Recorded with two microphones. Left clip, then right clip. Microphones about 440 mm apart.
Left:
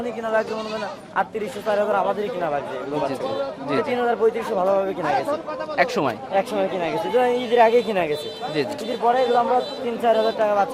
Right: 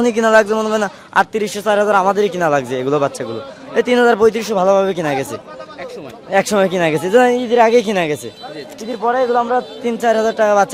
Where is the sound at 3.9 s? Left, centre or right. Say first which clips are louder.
Right 10 dB; right.